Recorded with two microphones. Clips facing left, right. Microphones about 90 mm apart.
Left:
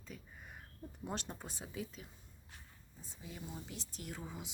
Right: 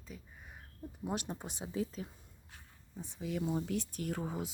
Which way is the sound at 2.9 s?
65° right (ahead or behind).